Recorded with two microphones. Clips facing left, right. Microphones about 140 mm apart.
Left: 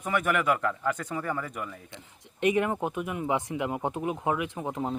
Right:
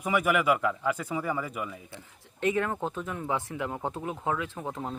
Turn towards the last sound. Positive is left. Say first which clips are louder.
# left 4 dB
turn(degrees=15)  # may be behind; listen again after turning